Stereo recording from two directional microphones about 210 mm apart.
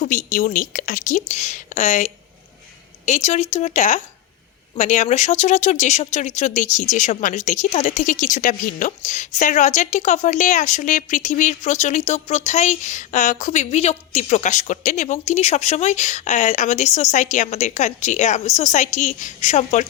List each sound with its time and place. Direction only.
0.0 s speech: 35° left (ahead or behind)